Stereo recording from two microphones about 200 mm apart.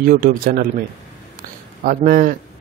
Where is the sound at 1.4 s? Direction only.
45° right (ahead or behind).